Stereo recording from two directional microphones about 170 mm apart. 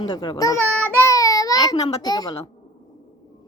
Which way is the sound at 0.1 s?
25° left (ahead or behind).